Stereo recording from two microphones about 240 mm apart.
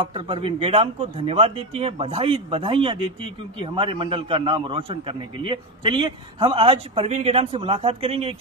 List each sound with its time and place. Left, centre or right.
0.0 s a man's voice: right